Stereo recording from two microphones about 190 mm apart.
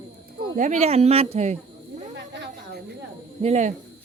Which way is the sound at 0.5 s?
40° right (ahead or behind).